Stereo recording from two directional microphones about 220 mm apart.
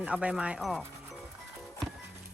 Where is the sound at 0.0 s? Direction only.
5° right (ahead or behind).